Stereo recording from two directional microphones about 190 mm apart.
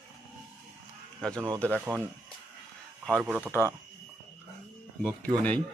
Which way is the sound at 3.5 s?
15° left (ahead or behind).